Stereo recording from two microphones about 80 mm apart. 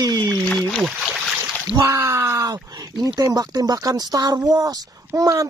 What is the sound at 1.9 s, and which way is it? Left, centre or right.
Speech, right.